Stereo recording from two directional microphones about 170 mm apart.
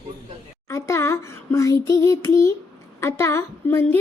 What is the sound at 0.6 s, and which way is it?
A child's voice, 15° left (ahead or behind).